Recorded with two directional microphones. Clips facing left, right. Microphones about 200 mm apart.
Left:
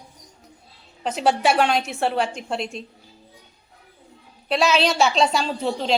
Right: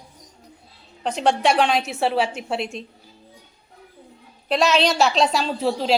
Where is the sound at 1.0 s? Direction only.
5° left (ahead or behind).